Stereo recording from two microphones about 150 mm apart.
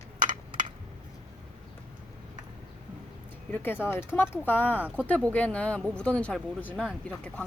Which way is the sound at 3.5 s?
15° left (ahead or behind).